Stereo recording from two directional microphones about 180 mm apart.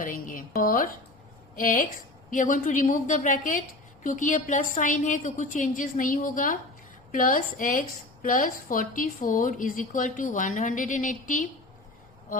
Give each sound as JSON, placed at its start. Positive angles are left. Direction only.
{"t": 0.0, "sound": "a woman's voice", "side_deg": 50}